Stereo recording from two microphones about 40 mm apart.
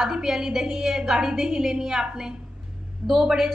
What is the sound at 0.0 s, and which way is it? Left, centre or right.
A woman's voice, centre.